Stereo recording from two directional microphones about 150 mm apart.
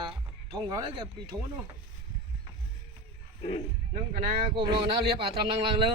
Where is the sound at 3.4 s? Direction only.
40° left (ahead or behind).